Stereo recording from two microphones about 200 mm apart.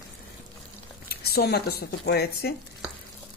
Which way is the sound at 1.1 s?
50° left (ahead or behind).